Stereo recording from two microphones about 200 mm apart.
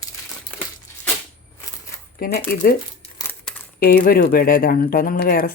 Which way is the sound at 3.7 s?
50° left (ahead or behind).